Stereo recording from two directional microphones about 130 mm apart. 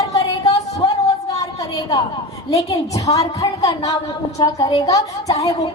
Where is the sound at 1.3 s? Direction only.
25° left (ahead or behind).